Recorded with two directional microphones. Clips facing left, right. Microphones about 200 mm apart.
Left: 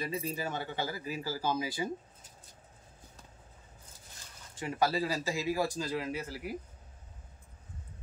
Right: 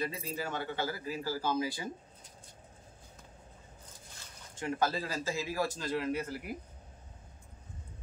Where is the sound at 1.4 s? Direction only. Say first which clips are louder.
Left 1 dB; 15° left (ahead or behind).